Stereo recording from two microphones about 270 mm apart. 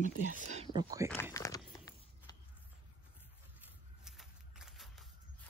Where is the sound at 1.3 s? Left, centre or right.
Centre.